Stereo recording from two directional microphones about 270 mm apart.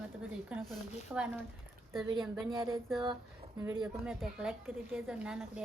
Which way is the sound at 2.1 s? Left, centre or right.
Centre.